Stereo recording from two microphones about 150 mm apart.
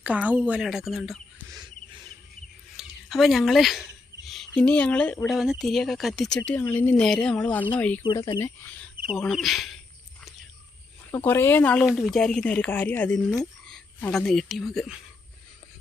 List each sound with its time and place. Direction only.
0.0 s speech: 10° right (ahead or behind)
2.7 s speech: centre (ahead or behind)
8.0 s speech: 30° left (ahead or behind)
8.4 s speech: 10° left (ahead or behind)
9.0 s speech: centre (ahead or behind)
11.3 s speech: 15° left (ahead or behind)